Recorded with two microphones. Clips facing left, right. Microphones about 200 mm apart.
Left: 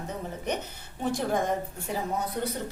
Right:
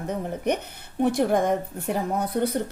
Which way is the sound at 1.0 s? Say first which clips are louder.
Right 6 dB; 60° right (ahead or behind).